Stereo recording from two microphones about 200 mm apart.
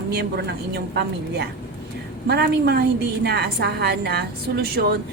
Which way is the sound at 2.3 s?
55° right (ahead or behind).